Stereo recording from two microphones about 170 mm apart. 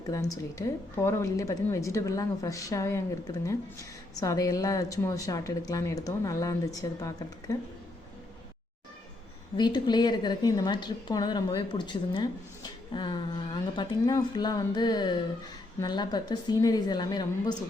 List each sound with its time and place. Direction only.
0.1 s a woman's voice: 20° left (ahead or behind)
9.6 s a woman's voice: 25° left (ahead or behind)